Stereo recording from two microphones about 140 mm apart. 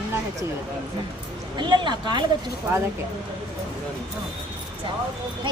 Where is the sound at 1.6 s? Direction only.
35° right (ahead or behind).